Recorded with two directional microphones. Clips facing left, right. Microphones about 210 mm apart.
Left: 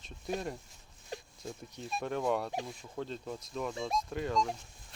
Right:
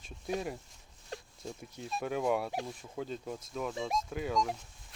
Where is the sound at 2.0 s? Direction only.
5° right (ahead or behind).